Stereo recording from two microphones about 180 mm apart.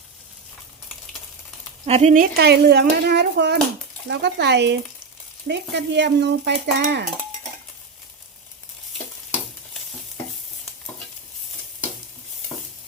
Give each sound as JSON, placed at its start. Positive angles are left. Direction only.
{"t": 1.9, "sound": "speech", "side_deg": -40}
{"t": 2.3, "sound": "speech", "side_deg": -65}